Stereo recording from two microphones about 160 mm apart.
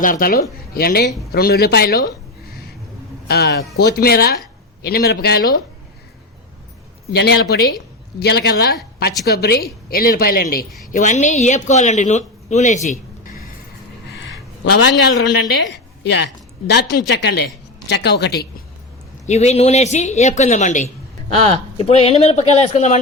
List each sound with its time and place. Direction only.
0.0 s speech: 60° left (ahead or behind)
3.2 s speech: 75° left (ahead or behind)
7.1 s speech: 90° left; by 10.7 s 70° left (ahead or behind)
10.9 s speech: 50° left (ahead or behind)
15.3 s a woman's voice: 90° left
19.2 s speech: 45° left (ahead or behind)